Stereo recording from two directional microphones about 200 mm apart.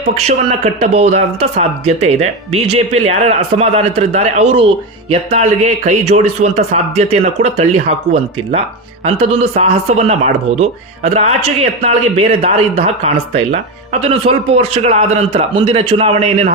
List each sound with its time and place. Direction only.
0.2 s speech: 30° right (ahead or behind)